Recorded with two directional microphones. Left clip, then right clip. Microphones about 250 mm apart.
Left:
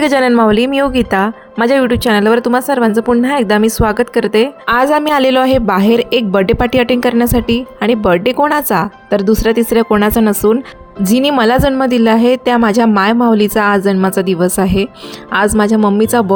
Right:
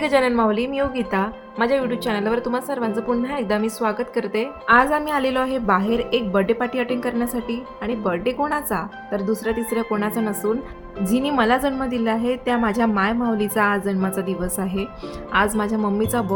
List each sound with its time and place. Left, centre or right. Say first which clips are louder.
0.0 s a woman's voice: left 8 dB; left